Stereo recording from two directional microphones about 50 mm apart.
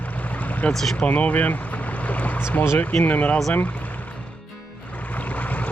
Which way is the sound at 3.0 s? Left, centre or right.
Left.